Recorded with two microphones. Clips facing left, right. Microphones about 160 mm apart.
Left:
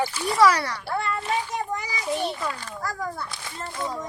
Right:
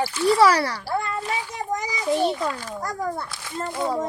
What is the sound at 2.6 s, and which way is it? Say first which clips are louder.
Speech: right 3 dB; 15° right (ahead or behind).